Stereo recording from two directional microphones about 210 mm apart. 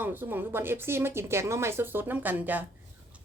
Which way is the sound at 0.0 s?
10° right (ahead or behind).